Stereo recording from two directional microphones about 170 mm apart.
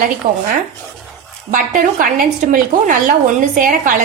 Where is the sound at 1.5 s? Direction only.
55° right (ahead or behind).